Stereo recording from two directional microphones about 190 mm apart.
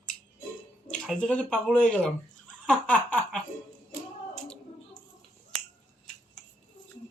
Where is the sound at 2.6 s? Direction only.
5° left (ahead or behind).